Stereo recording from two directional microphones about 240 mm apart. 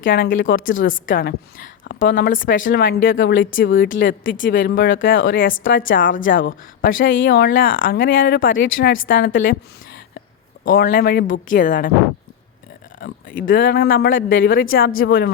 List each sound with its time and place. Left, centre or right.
0.1 s a woman's voice: left
3.1 s speech: left
3.8 s speech: left
10.7 s speech: left
13.0 s speech: left